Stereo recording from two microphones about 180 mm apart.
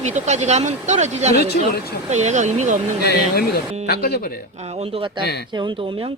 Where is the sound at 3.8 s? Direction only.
55° left (ahead or behind).